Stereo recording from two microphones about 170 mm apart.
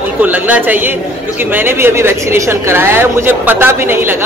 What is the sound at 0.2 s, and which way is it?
A man's voice, 10° right (ahead or behind).